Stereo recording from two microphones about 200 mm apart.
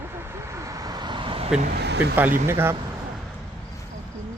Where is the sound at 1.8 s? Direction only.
55° right (ahead or behind).